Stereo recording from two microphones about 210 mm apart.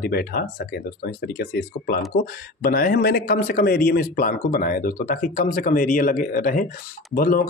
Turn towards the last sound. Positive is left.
turn(degrees=45)  # may be behind; listen again after turning